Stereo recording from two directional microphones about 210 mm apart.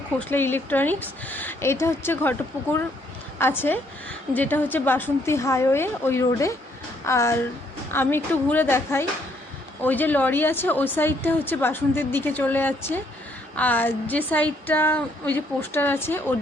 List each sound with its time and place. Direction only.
0.2 s a woman's voice: 10° left (ahead or behind)
3.3 s a woman's voice: 10° left (ahead or behind)